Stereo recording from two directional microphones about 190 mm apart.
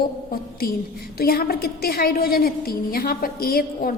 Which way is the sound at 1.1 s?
50° left (ahead or behind).